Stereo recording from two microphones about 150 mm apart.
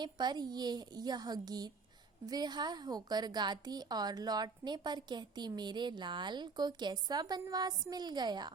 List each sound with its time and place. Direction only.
0.0 s a woman's voice: 30° right (ahead or behind)